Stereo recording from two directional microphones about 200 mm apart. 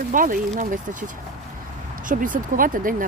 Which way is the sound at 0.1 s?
40° right (ahead or behind).